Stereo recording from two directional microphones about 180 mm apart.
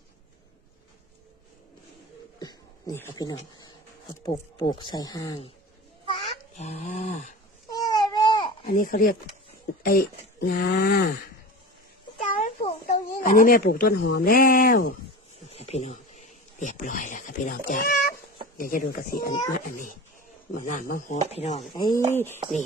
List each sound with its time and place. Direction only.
2.4 s a sound: 20° left (ahead or behind)
4.2 s speech: 25° left (ahead or behind)
6.6 s a child's voice: 40° left (ahead or behind)
7.7 s baby cry: 20° left (ahead or behind)
8.6 s a child's voice: 50° left (ahead or behind)
12.2 s speech: 45° left (ahead or behind)
15.4 s a sound: 35° left (ahead or behind)
17.7 s a child's voice: 50° left (ahead or behind)
21.8 s speech: 25° left (ahead or behind)
22.1 s speech: 10° left (ahead or behind)